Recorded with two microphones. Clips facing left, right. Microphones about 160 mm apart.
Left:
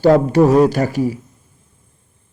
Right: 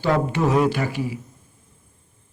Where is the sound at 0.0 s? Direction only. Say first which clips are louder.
Left 9 dB; 40° left (ahead or behind).